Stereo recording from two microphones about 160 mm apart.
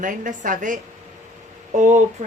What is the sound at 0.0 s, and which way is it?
A woman's voice, 55° right (ahead or behind).